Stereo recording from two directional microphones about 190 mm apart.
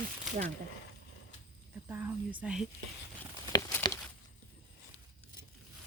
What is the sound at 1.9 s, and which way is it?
Speech, 10° right (ahead or behind).